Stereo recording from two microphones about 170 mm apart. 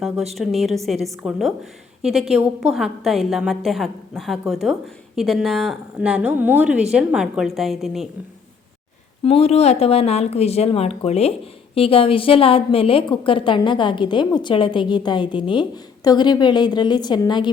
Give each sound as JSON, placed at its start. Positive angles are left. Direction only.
{"t": 0.3, "sound": "a woman's voice", "side_deg": 0}
{"t": 9.2, "sound": "speech", "side_deg": 35}